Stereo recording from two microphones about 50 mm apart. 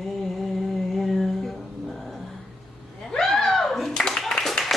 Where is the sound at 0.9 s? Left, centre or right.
Centre.